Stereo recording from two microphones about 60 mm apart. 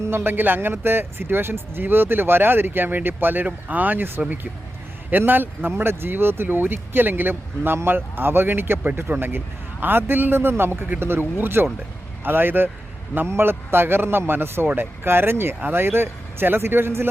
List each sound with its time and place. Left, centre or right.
0.0 s speech: right